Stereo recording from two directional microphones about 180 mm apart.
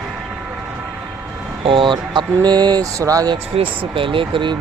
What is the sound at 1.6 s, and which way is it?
Speech, 30° right (ahead or behind).